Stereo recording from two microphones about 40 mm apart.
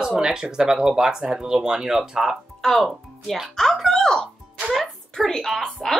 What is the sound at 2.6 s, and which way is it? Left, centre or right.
Speech, centre.